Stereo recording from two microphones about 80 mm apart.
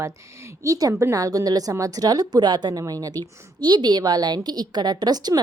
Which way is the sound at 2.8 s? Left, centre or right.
Right.